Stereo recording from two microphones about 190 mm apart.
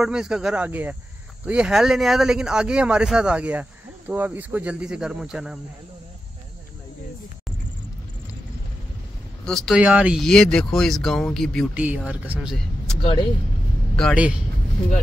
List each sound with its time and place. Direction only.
0.0 s speech: 5° right (ahead or behind)
9.5 s speech: centre (ahead or behind)
11.7 s speech: 5° right (ahead or behind)
13.9 s speech: centre (ahead or behind)